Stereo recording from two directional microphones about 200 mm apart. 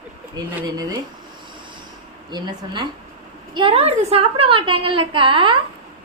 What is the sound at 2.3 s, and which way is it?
A woman's voice, 20° right (ahead or behind).